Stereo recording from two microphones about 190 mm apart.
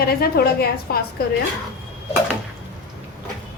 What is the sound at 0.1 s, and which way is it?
Speech, 55° left (ahead or behind).